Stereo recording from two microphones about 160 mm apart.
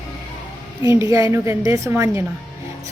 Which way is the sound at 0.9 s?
20° right (ahead or behind).